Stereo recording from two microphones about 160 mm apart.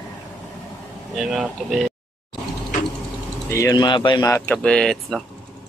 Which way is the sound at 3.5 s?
20° left (ahead or behind).